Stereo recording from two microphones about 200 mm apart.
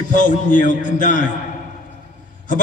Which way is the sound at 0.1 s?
40° left (ahead or behind).